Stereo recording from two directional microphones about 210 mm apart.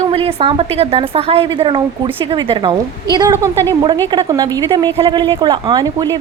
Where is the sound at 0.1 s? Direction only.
25° right (ahead or behind).